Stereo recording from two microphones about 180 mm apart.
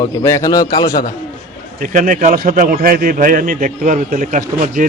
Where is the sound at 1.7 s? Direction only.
45° right (ahead or behind).